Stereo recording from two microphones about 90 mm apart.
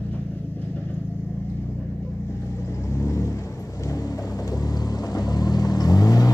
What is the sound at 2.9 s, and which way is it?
Vehicle, 35° left (ahead or behind).